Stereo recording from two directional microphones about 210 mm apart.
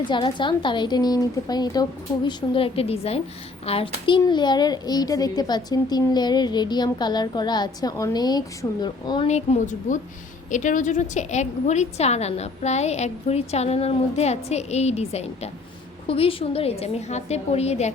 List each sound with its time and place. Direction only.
0.1 s a child's voice: 25° left (ahead or behind)
9.2 s a woman's voice: 30° left (ahead or behind)